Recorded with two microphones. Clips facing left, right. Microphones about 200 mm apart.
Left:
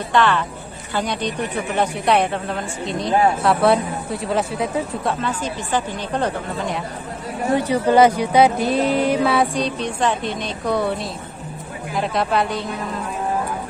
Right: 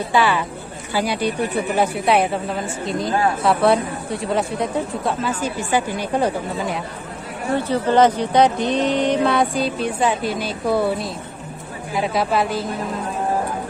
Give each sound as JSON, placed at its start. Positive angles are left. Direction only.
{"t": 0.1, "sound": "a woman's voice", "side_deg": -10}
{"t": 7.5, "sound": "speech", "side_deg": 15}